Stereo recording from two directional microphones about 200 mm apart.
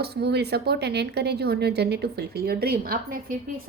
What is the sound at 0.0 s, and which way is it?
Speech, 55° right (ahead or behind).